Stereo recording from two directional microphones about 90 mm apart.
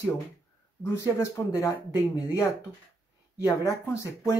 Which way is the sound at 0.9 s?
30° left (ahead or behind).